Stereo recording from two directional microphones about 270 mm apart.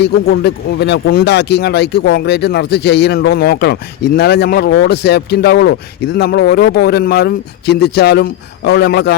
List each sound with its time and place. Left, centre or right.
0.0 s speech: left